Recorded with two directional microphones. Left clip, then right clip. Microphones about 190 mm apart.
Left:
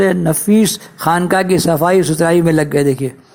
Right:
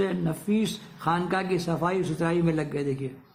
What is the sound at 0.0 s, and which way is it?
Speech, 40° left (ahead or behind).